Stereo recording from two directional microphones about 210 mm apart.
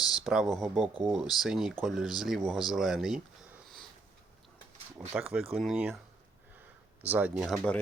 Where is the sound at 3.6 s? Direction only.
Centre (ahead or behind).